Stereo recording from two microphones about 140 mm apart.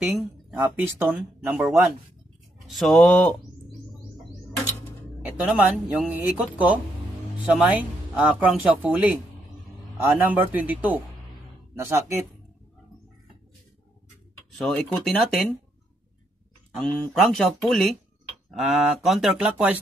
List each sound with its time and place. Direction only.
0.0 s speech: 10° right (ahead or behind)
2.6 s speech: centre (ahead or behind)
5.2 s speech: 5° right (ahead or behind)
8.2 s speech: 5° right (ahead or behind)
14.6 s speech: 5° left (ahead or behind)
16.8 s speech: centre (ahead or behind)